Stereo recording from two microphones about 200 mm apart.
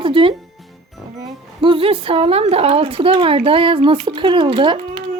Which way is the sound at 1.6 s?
25° right (ahead or behind).